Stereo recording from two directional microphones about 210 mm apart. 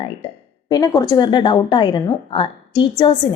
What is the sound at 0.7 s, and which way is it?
A woman's voice, 15° left (ahead or behind).